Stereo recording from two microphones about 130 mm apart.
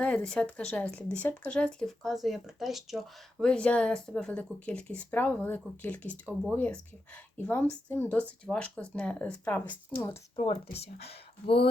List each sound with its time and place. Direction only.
0.0 s speech: 10° left (ahead or behind)
10.3 s speech: 40° left (ahead or behind)